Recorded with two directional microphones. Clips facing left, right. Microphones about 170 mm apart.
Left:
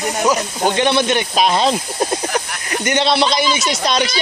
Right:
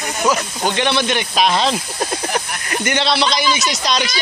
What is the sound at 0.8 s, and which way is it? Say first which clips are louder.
Speech: left 3 dB; 45° left (ahead or behind).